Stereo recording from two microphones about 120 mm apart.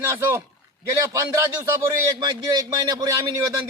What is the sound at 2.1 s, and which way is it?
Speech, 30° right (ahead or behind).